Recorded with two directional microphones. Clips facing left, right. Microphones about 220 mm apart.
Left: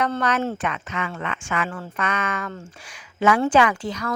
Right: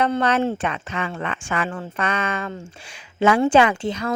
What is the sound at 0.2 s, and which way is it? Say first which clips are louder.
Speech: right 3 dB; 30° right (ahead or behind).